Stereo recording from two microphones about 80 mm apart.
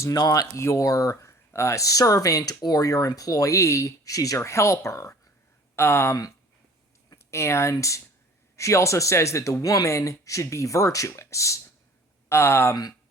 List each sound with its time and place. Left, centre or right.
0.0 s speech: left
0.6 s speech: left
7.2 s speech: left